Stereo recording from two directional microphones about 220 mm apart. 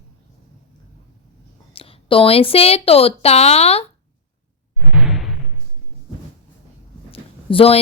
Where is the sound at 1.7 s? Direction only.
25° left (ahead or behind).